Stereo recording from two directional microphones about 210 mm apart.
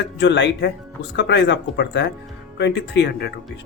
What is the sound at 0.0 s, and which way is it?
Speech, 60° left (ahead or behind).